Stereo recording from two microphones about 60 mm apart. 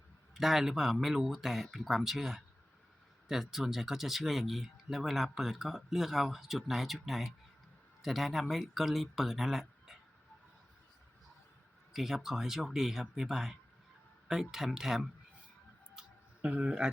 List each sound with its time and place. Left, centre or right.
0.3 s speech: centre
11.9 s speech: centre
16.4 s speech: right